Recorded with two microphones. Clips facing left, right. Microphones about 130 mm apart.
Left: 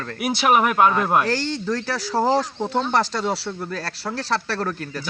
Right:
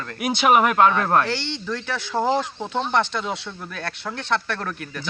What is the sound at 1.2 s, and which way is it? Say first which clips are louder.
Speech: left 4 dB; 40° left (ahead or behind).